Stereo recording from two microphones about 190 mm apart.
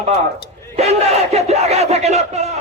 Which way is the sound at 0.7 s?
35° right (ahead or behind).